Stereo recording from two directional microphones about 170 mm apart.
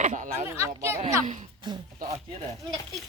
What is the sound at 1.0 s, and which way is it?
Speech, 40° right (ahead or behind).